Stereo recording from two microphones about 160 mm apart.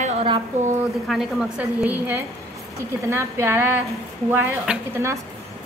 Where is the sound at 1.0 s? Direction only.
Centre (ahead or behind).